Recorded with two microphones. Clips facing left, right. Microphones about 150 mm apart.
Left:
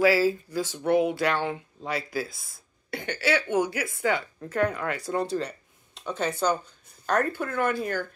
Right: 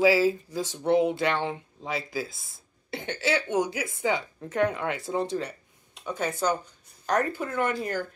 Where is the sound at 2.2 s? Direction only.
Centre (ahead or behind).